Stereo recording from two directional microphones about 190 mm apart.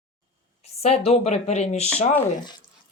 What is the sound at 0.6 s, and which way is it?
A woman's voice, 35° left (ahead or behind).